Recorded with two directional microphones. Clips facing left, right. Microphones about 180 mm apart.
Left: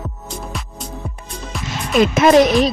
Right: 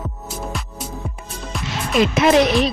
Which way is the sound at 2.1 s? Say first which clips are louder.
Left 4 dB; 45° left (ahead or behind).